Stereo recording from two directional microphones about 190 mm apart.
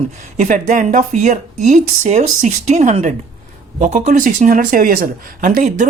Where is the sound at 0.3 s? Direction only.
40° right (ahead or behind).